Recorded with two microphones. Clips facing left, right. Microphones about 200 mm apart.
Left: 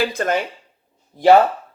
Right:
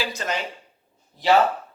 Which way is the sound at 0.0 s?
55° left (ahead or behind).